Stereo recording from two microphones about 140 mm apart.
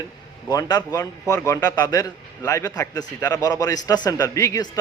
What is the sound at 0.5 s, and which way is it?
A man's voice, 25° left (ahead or behind).